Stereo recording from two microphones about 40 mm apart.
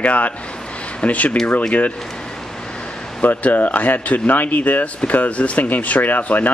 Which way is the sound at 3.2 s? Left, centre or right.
Left.